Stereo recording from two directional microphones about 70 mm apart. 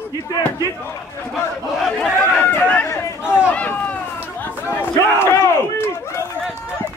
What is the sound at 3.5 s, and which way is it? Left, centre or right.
Run, left.